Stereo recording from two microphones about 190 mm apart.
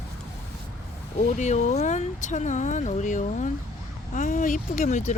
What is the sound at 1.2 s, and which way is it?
Speech, 40° left (ahead or behind).